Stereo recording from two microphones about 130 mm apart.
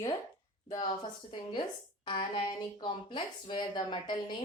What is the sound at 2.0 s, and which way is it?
A woman's voice, 40° left (ahead or behind).